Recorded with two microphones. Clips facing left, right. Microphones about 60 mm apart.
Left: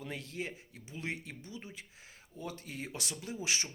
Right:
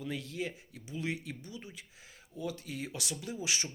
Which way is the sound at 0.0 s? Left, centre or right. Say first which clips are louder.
Right 3 dB; left.